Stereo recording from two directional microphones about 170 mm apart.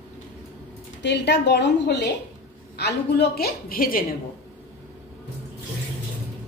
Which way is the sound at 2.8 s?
75° left (ahead or behind).